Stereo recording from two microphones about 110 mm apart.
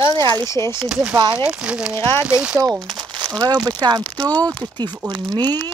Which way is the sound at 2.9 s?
40° right (ahead or behind).